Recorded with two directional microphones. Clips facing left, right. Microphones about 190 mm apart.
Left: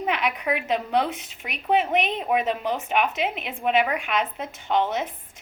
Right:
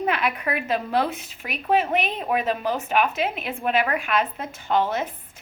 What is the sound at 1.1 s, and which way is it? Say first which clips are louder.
Speech: right 1 dB; 90° left.